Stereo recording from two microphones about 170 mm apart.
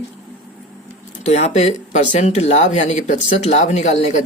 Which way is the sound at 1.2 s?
40° left (ahead or behind).